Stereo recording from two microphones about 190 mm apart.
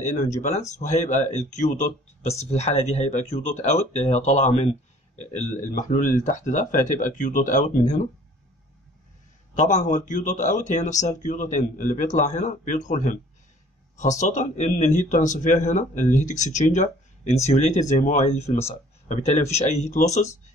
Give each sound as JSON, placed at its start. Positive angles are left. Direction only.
{"t": 0.0, "sound": "speech", "side_deg": 40}
{"t": 9.6, "sound": "speech", "side_deg": 40}